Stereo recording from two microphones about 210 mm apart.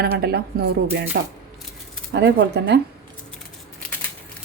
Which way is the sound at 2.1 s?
55° right (ahead or behind).